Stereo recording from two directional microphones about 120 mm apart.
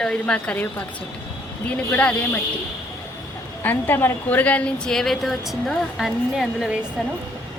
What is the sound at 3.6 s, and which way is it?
A woman's voice, 15° left (ahead or behind).